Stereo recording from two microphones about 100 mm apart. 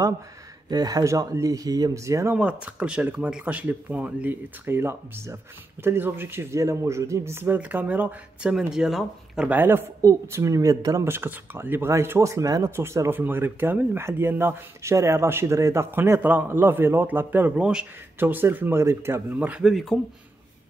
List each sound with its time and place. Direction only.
0.7 s speech: 40° right (ahead or behind)
2.3 s speech: 10° right (ahead or behind)
9.5 s speech: 20° right (ahead or behind)
11.1 s speech: 20° right (ahead or behind)
19.6 s speech: centre (ahead or behind)